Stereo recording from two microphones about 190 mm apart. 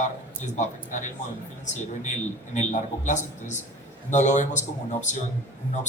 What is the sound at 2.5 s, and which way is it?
A man's voice, 40° left (ahead or behind).